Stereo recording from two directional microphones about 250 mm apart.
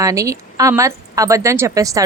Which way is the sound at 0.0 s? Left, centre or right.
Centre.